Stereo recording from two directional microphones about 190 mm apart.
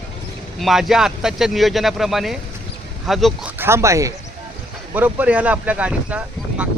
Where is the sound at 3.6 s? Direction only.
15° right (ahead or behind).